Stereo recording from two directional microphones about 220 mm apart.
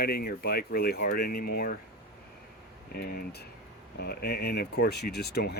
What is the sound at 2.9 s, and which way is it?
Speech, 45° left (ahead or behind).